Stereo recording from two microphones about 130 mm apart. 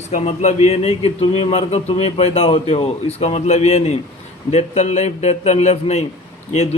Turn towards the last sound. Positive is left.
turn(degrees=60)  # may be behind; listen again after turning